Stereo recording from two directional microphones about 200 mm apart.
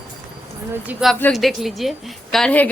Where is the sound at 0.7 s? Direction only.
5° right (ahead or behind).